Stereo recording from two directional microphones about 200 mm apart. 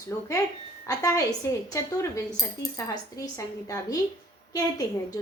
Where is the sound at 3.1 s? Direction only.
15° left (ahead or behind).